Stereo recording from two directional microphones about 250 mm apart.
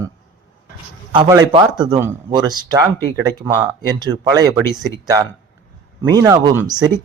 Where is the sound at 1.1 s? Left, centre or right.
Centre.